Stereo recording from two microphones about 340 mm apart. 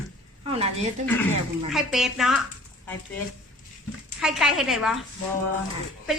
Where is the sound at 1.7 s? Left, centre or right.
Centre.